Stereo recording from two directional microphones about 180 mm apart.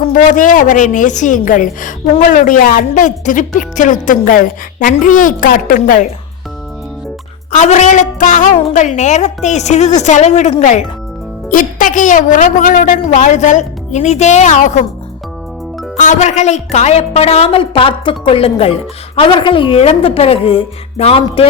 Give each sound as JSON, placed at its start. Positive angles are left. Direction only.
{"t": 0.1, "sound": "speech", "side_deg": 45}
{"t": 7.5, "sound": "a woman's voice", "side_deg": 40}
{"t": 16.0, "sound": "a woman's voice", "side_deg": 40}